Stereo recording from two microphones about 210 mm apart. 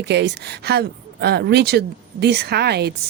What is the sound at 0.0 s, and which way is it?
Speech, 55° right (ahead or behind).